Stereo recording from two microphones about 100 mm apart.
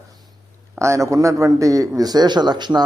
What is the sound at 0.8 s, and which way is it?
Speech, 30° right (ahead or behind).